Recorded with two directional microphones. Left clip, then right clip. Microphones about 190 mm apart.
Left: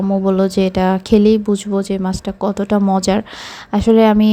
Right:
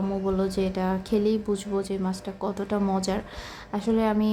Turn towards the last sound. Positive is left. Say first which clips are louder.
# left 13 dB
turn(degrees=40)  # may be behind; listen again after turning